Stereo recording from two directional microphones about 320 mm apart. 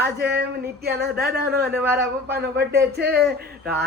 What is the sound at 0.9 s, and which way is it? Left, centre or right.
Speech, right.